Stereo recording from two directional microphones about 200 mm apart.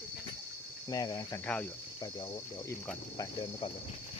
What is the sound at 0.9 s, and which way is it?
Speech, 20° left (ahead or behind).